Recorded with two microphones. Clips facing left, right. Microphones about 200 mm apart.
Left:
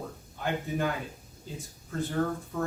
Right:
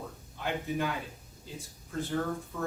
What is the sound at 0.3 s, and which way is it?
Speech, 45° left (ahead or behind).